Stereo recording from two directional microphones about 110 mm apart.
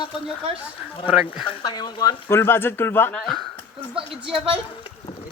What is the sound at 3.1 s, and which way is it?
Speech, 5° left (ahead or behind).